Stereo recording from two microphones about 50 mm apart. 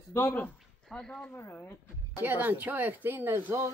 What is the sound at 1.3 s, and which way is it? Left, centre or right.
Speech, left.